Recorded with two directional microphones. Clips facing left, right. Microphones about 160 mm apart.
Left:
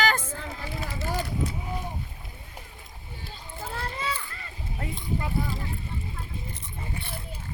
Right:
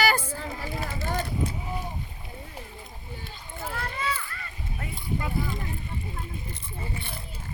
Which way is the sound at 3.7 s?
30° left (ahead or behind).